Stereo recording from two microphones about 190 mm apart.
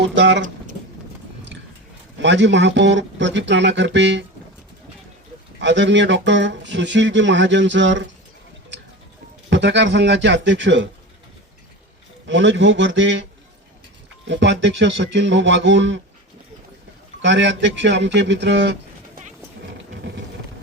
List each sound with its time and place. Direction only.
0.0 s speech: 70° right (ahead or behind)
2.2 s speech: 70° right (ahead or behind)
5.5 s speech: 70° right (ahead or behind)
9.5 s speech: 70° right (ahead or behind)
12.2 s speech: 75° right (ahead or behind)
14.3 s speech: 70° right (ahead or behind)
17.2 s speech: 70° right (ahead or behind)